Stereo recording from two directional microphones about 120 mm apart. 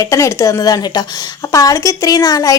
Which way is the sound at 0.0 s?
25° left (ahead or behind).